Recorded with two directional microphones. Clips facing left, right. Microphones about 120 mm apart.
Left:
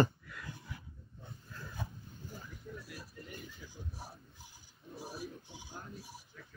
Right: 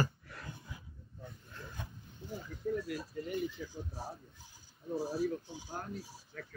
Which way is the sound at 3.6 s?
60° right (ahead or behind).